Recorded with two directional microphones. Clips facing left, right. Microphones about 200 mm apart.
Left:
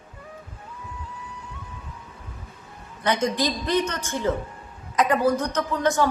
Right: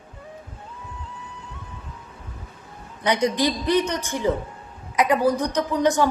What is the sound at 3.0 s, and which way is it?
A woman's voice, 15° right (ahead or behind).